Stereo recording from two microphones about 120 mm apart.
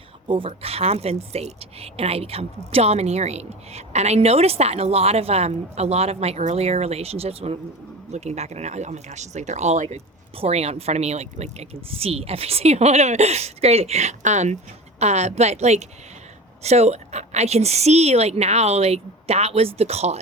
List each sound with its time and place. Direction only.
0.3 s speech: 45° right (ahead or behind); by 20.1 s 60° right (ahead or behind)